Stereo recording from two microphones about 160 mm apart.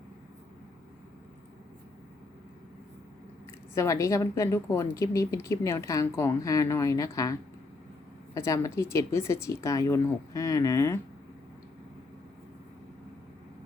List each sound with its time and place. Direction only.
3.8 s a woman's voice: 20° left (ahead or behind)